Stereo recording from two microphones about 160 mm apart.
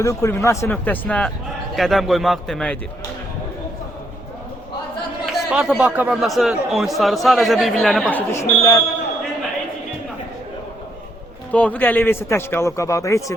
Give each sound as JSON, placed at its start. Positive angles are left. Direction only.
{"t": 0.0, "sound": "a man's voice", "side_deg": 20}
{"t": 5.2, "sound": "speech", "side_deg": -5}
{"t": 8.1, "sound": "a man's voice", "side_deg": 15}
{"t": 11.5, "sound": "a man's voice", "side_deg": 10}